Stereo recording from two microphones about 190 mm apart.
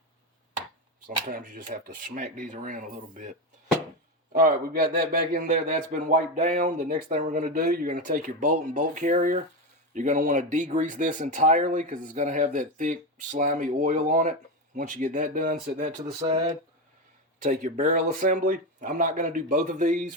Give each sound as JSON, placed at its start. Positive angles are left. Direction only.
{"t": 1.3, "sound": "a man's voice", "side_deg": -45}
{"t": 17.4, "sound": "a man's voice", "side_deg": -40}